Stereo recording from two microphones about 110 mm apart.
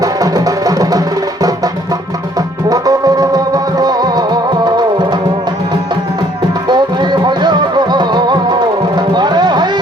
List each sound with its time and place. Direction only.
0.0 s music: 35° right (ahead or behind)
6.7 s music: 40° right (ahead or behind)